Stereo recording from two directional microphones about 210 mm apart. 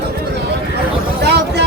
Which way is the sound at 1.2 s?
55° right (ahead or behind).